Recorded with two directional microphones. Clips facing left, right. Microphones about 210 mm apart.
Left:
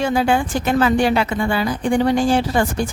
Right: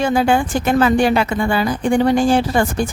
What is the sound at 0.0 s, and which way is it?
Speech, 50° right (ahead or behind).